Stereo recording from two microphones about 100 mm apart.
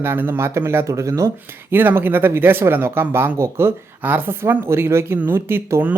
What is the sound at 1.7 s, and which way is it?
Speech, 20° right (ahead or behind).